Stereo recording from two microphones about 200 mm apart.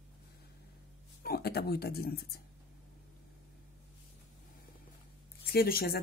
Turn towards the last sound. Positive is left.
turn(degrees=50)  # may be behind; listen again after turning